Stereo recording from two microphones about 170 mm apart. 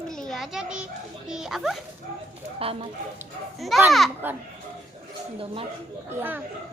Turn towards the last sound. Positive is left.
turn(degrees=-10)  # may be behind; listen again after turning